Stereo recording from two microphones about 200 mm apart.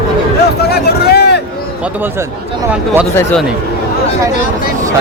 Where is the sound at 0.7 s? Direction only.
50° left (ahead or behind).